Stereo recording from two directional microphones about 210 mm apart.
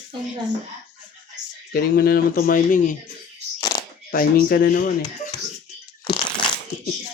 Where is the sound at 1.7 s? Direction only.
45° left (ahead or behind).